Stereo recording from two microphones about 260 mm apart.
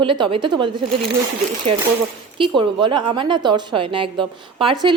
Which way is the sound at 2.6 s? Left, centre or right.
Centre.